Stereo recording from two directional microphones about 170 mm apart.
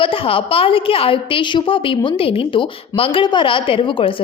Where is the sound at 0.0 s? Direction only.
30° left (ahead or behind).